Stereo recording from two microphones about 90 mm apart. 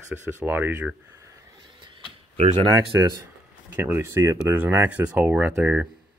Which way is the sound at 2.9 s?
35° right (ahead or behind).